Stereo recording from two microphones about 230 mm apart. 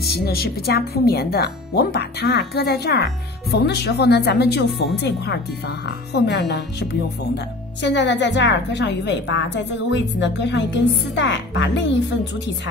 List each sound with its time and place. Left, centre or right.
0.0 s speech: left